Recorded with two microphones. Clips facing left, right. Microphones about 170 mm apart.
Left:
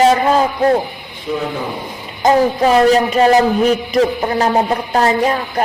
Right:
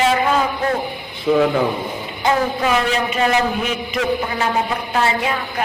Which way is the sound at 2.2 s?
35° left (ahead or behind).